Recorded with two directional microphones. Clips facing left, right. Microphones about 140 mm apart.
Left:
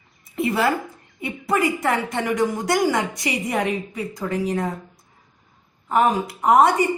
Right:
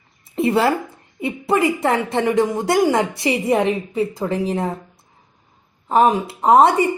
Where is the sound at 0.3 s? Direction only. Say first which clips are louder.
Right 4 dB; 25° right (ahead or behind).